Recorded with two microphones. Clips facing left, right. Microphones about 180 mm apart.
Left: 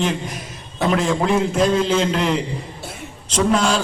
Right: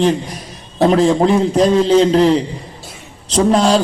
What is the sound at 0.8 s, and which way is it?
A man's voice, 35° right (ahead or behind).